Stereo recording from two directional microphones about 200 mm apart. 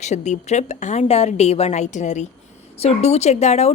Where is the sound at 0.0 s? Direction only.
35° left (ahead or behind).